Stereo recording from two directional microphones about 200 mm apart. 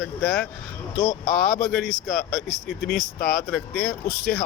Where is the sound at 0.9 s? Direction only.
50° left (ahead or behind).